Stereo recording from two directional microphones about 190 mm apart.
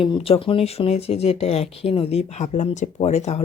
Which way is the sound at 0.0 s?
30° left (ahead or behind).